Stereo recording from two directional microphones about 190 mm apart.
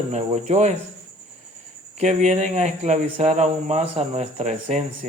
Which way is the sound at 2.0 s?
40° right (ahead or behind).